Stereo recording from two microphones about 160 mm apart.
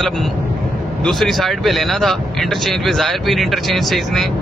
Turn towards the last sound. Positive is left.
turn(degrees=0)  # may be behind; listen again after turning